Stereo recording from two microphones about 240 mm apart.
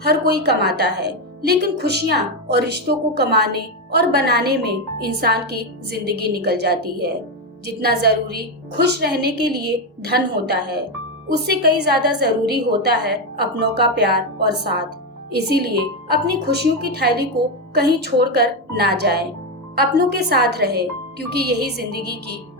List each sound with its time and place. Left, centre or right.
0.0 s a woman's voice: right